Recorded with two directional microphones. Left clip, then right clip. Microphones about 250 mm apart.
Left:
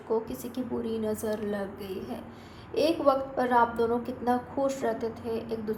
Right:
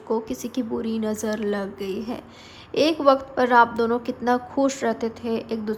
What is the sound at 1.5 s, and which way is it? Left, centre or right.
Speech, right.